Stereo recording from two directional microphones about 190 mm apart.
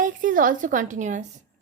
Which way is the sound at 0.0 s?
45° right (ahead or behind).